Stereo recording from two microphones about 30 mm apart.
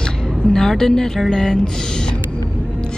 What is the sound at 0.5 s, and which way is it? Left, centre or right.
Speech, centre.